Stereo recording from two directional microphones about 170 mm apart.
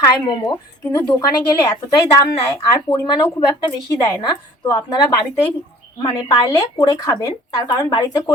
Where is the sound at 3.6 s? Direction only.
25° left (ahead or behind).